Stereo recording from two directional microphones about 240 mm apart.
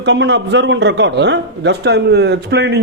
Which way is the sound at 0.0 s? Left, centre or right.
Right.